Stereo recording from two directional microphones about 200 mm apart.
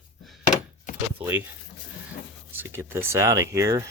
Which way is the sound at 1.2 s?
5° right (ahead or behind).